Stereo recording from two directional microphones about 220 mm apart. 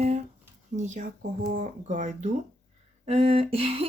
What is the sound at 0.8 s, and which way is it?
Speech, 30° right (ahead or behind).